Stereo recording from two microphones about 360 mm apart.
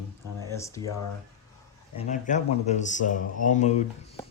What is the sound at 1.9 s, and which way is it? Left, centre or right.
Speech, centre.